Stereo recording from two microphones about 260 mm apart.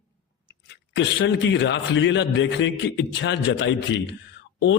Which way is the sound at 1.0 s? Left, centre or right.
Left.